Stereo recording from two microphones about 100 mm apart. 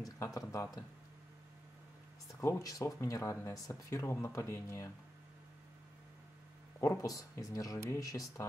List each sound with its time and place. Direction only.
0.0 s speech: 35° left (ahead or behind)
2.4 s speech: 30° left (ahead or behind)
6.8 s speech: 30° left (ahead or behind)